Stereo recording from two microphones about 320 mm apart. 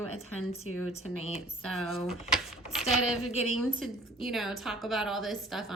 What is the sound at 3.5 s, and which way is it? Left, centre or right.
A woman's voice, centre.